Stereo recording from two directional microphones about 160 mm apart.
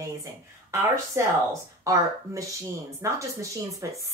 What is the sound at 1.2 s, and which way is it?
Speech, 15° right (ahead or behind).